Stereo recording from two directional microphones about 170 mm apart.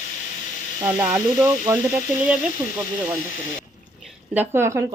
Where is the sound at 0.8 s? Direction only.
10° right (ahead or behind).